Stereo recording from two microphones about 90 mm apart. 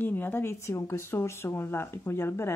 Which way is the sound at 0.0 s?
20° left (ahead or behind).